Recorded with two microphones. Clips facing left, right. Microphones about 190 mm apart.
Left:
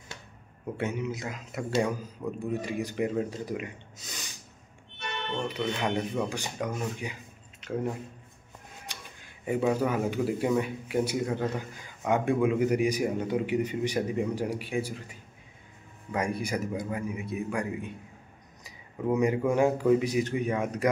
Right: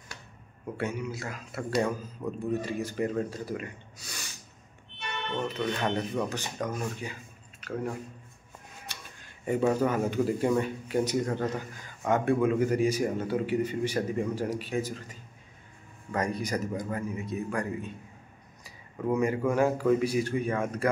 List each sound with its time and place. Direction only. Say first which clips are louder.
0.7 s a man's voice: left 1 dB; 20° left (ahead or behind)
8.8 s a man's voice: left 1 dB; 10° left (ahead or behind)